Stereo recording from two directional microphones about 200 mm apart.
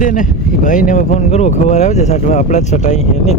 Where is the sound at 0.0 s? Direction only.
40° left (ahead or behind).